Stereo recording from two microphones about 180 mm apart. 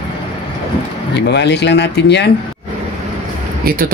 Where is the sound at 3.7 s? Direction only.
55° right (ahead or behind).